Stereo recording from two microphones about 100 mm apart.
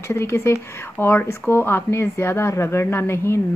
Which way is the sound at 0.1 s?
25° left (ahead or behind).